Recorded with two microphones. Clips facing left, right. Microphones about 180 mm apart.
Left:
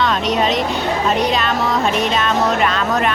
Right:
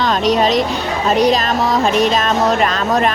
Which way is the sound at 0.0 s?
35° right (ahead or behind).